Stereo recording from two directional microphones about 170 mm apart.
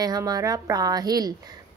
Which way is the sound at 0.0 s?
20° right (ahead or behind).